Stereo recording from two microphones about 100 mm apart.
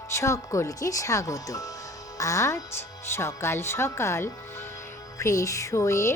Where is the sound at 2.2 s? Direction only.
30° left (ahead or behind).